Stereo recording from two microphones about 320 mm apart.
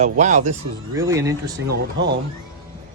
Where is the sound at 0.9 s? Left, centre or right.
Centre.